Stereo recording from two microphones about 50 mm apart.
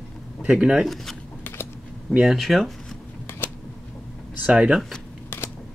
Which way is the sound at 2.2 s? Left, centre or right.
Centre.